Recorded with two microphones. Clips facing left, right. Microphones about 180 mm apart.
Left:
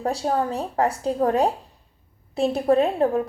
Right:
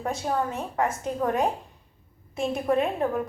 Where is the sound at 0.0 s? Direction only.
35° left (ahead or behind).